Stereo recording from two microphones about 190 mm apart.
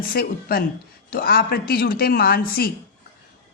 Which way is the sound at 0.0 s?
50° left (ahead or behind).